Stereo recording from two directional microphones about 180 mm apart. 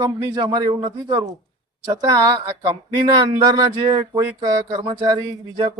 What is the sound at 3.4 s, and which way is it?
Speech, 20° right (ahead or behind).